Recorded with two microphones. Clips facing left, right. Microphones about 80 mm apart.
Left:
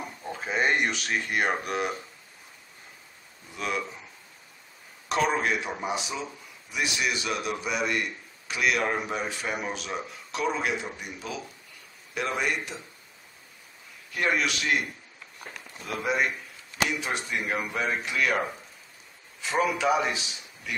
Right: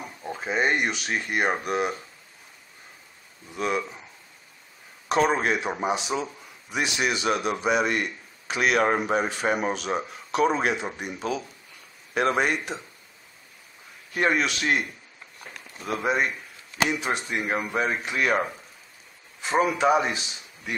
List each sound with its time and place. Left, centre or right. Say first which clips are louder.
0.2 s speech: right 2 dB; centre
3.5 s speech: right 4 dB; right
5.0 s a man's voice: right 3 dB; right
12.1 s speech: right 6 dB; right
14.1 s a man's voice: right 3 dB; right
16.0 s speech: right 1 dB; right
19.4 s a man's voice: right 4 dB; right